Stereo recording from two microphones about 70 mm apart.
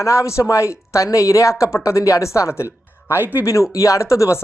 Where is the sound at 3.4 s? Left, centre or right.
Left.